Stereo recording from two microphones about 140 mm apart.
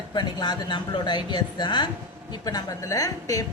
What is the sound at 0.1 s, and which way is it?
Speech, 30° left (ahead or behind).